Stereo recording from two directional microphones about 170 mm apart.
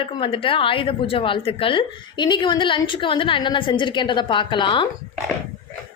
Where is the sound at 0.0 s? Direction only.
30° left (ahead or behind).